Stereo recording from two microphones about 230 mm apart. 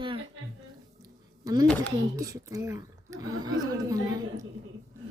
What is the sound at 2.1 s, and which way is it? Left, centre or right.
A woman's voice, centre.